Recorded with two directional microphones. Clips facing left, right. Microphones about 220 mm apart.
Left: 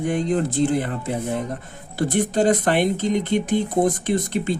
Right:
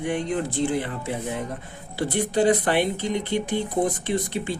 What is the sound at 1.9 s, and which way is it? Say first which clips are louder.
Speech: left 3 dB; 45° left (ahead or behind).